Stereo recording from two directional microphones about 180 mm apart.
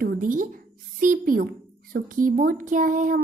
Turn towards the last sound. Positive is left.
turn(degrees=-45)  # may be behind; listen again after turning